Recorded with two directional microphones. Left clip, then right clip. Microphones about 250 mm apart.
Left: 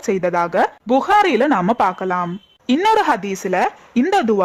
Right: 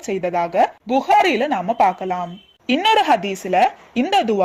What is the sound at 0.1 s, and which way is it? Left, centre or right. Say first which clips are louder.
A woman's voice: left 3 dB; centre.